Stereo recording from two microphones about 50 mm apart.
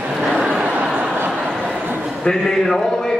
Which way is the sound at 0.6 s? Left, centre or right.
Right.